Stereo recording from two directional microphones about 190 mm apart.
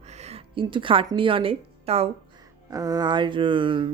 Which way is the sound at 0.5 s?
25° right (ahead or behind).